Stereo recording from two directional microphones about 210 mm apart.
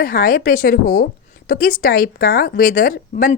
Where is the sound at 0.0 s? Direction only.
40° left (ahead or behind).